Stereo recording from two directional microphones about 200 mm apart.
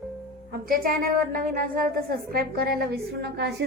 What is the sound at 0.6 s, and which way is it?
A woman's voice, 45° right (ahead or behind).